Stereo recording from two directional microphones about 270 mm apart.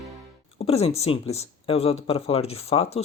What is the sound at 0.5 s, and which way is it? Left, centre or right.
Speech, left.